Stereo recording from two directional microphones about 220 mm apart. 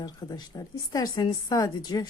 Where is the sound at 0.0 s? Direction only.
15° left (ahead or behind).